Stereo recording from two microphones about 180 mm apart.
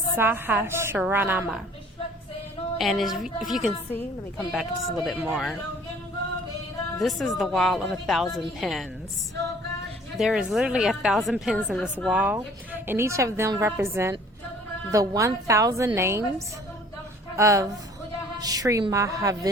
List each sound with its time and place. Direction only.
0.2 s a woman's voice: 10° right (ahead or behind)
2.7 s a woman's voice: centre (ahead or behind)
7.0 s a woman's voice: centre (ahead or behind)
10.2 s a woman's voice: centre (ahead or behind)
17.3 s a woman's voice: 15° right (ahead or behind)